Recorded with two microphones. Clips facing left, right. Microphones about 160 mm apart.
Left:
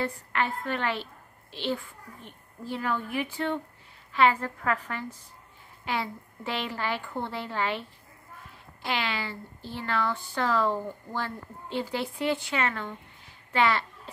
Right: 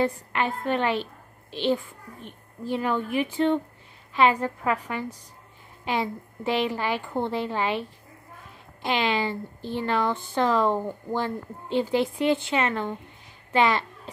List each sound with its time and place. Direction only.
0.0 s a woman's voice: 20° right (ahead or behind)
8.8 s speech: 20° right (ahead or behind)